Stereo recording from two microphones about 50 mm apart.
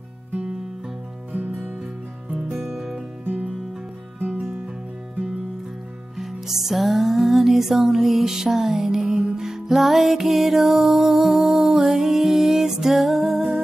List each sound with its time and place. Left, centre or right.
1.3 s music: right; by 3.0 s centre
4.2 s music: right
6.1 s music: centre